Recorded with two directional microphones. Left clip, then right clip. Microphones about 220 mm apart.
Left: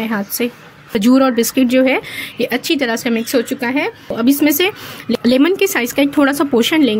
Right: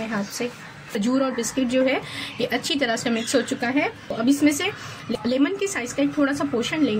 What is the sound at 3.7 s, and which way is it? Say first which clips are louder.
A woman's voice: left 5 dB; 45° left (ahead or behind).